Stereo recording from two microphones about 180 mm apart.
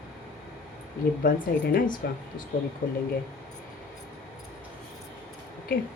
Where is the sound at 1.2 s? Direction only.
55° left (ahead or behind).